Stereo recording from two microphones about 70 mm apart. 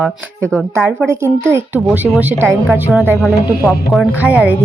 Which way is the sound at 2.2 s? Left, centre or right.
Right.